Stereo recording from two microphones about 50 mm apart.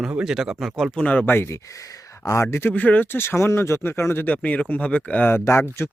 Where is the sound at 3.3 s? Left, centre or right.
Left.